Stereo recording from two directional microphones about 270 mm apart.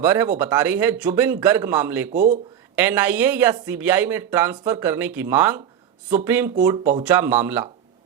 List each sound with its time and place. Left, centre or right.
0.0 s speech: centre
2.1 s speech: right
2.7 s speech: centre